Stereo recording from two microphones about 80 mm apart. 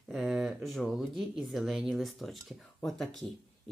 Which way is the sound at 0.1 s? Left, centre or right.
Centre.